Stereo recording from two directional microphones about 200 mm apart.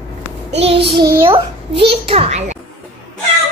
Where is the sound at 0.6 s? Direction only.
30° right (ahead or behind).